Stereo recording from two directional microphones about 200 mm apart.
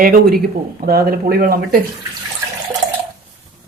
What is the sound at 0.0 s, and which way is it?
Speech, 45° right (ahead or behind).